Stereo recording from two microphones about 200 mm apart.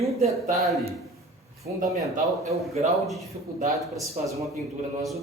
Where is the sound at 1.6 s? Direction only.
40° right (ahead or behind).